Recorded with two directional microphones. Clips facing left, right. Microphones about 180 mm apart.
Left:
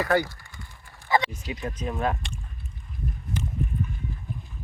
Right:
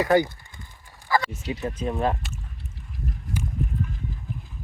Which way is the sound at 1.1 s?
20° left (ahead or behind).